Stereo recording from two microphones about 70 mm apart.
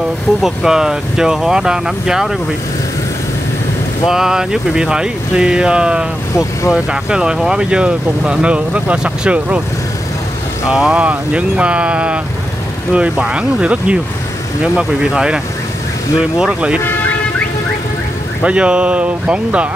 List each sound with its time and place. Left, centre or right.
0.4 s speech: centre
4.1 s speech: centre
10.7 s speech: centre
18.4 s speech: centre